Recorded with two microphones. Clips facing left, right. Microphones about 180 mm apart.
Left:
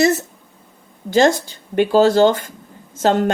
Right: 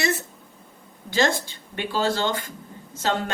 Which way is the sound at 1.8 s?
45° left (ahead or behind).